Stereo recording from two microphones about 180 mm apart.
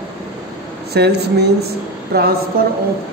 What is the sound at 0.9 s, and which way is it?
Speech, 65° right (ahead or behind).